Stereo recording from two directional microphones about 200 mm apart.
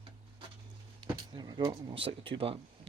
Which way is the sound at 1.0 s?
20° right (ahead or behind).